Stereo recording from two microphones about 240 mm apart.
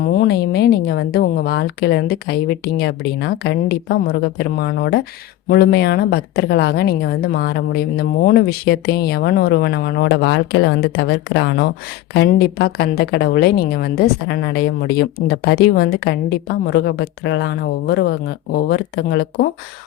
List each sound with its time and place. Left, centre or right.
0.0 s a woman's voice: left